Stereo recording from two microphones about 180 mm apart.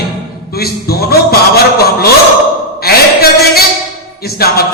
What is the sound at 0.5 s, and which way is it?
Speech, 60° left (ahead or behind).